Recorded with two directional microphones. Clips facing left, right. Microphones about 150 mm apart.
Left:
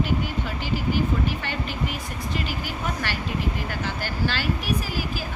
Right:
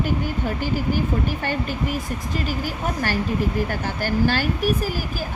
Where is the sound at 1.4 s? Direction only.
45° right (ahead or behind).